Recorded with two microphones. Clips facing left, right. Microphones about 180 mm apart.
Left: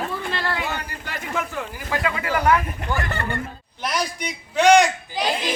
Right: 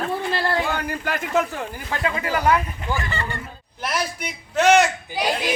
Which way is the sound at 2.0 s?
25° right (ahead or behind).